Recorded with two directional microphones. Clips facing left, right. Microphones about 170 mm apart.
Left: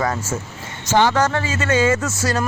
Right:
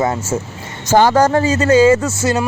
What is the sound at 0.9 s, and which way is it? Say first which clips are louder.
Speech: right 5 dB; 40° right (ahead or behind).